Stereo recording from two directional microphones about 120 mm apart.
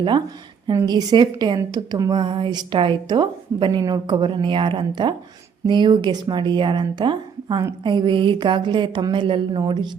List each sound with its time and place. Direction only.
0.7 s a woman's voice: 30° right (ahead or behind)